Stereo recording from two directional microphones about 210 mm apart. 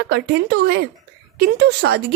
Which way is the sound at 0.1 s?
50° right (ahead or behind).